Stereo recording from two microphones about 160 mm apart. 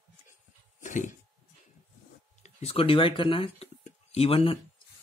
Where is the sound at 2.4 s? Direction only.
40° left (ahead or behind).